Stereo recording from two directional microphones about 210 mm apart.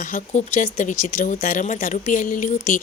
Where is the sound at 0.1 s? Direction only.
35° left (ahead or behind).